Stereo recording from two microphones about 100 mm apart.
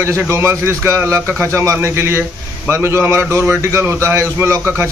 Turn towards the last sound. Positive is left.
turn(degrees=-25)  # may be behind; listen again after turning